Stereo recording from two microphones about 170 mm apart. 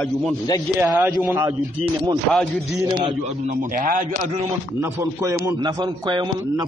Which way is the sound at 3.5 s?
55° right (ahead or behind).